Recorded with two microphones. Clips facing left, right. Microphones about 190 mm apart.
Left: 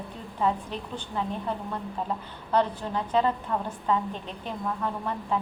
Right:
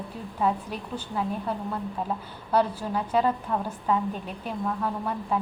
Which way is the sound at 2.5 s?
10° right (ahead or behind).